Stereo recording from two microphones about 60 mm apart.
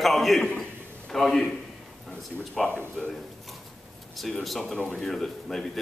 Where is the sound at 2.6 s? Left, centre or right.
Centre.